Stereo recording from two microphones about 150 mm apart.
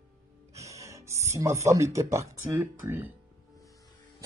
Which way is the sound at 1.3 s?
20° right (ahead or behind).